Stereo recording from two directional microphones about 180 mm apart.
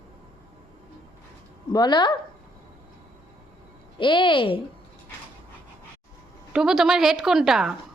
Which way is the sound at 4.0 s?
25° left (ahead or behind).